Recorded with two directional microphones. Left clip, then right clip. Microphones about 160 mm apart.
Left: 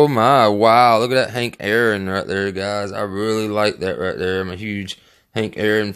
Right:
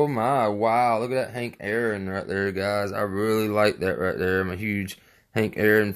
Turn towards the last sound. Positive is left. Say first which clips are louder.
# left 2 dB
turn(degrees=10)  # may be behind; listen again after turning